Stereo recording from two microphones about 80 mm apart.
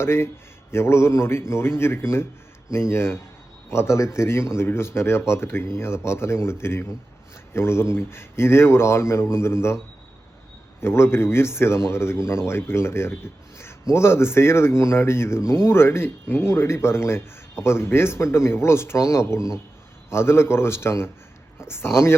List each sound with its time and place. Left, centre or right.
0.0 s speech: left
10.8 s speech: left